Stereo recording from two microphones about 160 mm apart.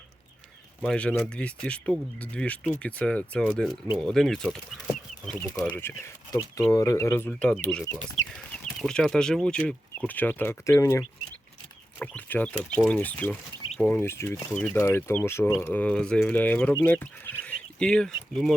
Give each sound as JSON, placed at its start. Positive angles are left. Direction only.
{"t": 0.8, "sound": "speech", "side_deg": 5}
{"t": 5.6, "sound": "speech", "side_deg": 15}
{"t": 14.0, "sound": "speech", "side_deg": 15}
{"t": 14.8, "sound": "speech", "side_deg": 15}